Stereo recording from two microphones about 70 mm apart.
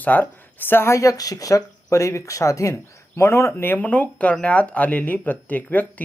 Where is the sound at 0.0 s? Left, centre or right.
Left.